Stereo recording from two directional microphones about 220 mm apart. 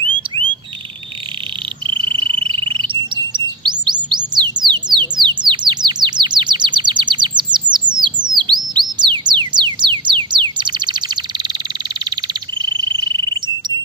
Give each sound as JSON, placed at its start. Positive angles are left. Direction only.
{"t": 1.9, "sound": "bird", "side_deg": -25}
{"t": 12.8, "sound": "frog", "side_deg": -20}